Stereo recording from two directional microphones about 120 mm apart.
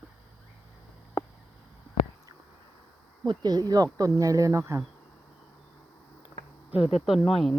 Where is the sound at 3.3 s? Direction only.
35° right (ahead or behind).